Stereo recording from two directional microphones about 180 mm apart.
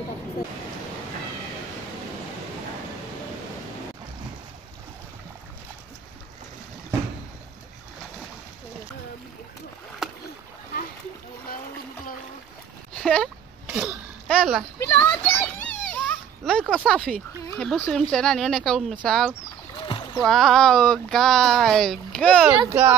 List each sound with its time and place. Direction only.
12.9 s a sound: 5° left (ahead or behind)
16.7 s speech: 5° left (ahead or behind)
19.8 s splash: 25° left (ahead or behind)
20.2 s speech: centre (ahead or behind)
22.7 s speech: 15° right (ahead or behind)